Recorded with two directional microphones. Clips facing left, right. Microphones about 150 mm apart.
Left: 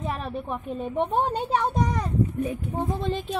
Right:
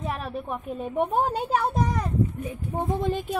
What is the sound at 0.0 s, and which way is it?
A woman's voice, 5° right (ahead or behind).